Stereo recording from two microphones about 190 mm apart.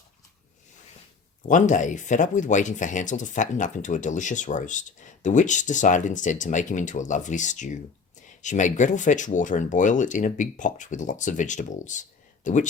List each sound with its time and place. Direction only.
1.5 s speech: 40° left (ahead or behind)